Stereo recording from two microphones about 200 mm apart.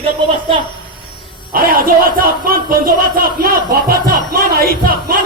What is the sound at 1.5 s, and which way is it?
Speech, 45° right (ahead or behind).